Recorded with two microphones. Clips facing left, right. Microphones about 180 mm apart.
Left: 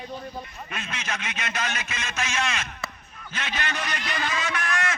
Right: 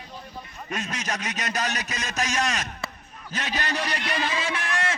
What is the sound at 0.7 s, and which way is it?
A man's voice, 40° right (ahead or behind).